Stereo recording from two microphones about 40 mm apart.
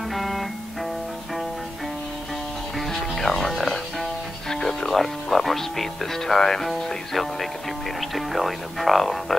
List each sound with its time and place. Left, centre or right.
0.1 s music: centre
2.9 s music: centre
4.6 s speech: centre